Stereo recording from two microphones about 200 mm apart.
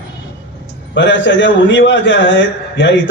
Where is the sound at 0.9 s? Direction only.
65° left (ahead or behind).